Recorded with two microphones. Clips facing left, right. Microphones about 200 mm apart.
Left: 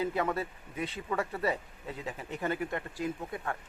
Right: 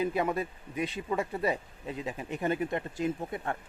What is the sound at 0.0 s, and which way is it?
Speech, 15° right (ahead or behind).